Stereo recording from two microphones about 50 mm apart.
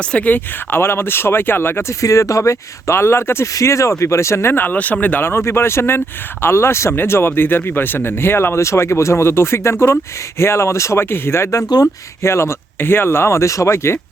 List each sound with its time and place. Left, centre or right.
0.0 s speech: left
0.3 s speech: left
1.9 s speech: left
4.5 s speech: left
5.2 s speech: left
6.9 s speech: left